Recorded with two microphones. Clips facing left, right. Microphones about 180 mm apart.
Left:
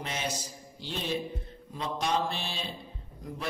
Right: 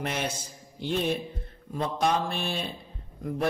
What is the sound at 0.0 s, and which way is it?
A man's voice, 55° right (ahead or behind).